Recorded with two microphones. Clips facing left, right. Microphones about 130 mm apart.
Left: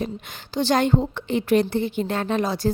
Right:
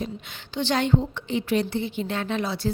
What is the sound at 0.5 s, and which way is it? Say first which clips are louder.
A woman's voice: left 3 dB; 40° left (ahead or behind).